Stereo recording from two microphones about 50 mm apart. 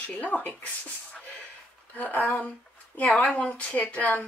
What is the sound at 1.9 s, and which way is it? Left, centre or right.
Speech, left.